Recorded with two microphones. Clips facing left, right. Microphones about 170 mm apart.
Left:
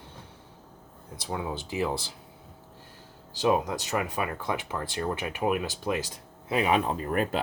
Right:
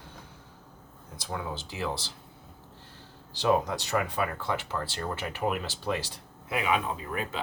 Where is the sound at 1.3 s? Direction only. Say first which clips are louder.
Left 3 dB; 20° left (ahead or behind).